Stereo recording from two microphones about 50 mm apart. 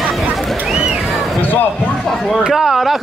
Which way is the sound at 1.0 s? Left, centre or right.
Centre.